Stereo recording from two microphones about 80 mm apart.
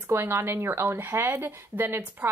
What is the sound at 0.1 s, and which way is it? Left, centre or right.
A woman's voice, right.